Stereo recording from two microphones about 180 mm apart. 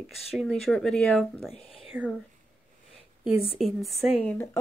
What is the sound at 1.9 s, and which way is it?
Speech, 5° right (ahead or behind).